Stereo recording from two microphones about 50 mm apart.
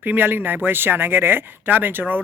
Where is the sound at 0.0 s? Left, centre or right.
Right.